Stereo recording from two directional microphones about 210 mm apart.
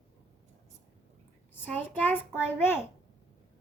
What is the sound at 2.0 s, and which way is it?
Speech, 10° left (ahead or behind).